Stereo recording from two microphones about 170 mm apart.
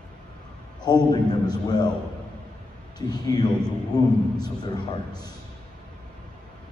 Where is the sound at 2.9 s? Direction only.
25° left (ahead or behind).